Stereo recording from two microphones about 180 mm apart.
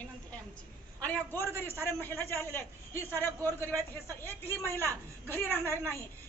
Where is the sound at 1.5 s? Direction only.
15° right (ahead or behind).